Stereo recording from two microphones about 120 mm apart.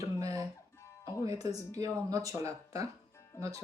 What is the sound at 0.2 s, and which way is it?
Music, 25° right (ahead or behind).